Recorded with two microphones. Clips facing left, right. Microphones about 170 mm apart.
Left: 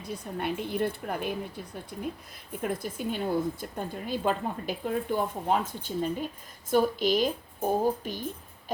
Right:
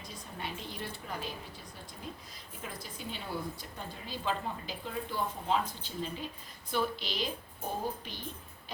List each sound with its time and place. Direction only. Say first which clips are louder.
0.1 s a woman's voice: left 11 dB; 60° left (ahead or behind)